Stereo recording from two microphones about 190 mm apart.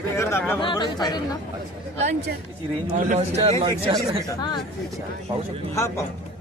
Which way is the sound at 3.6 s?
25° right (ahead or behind).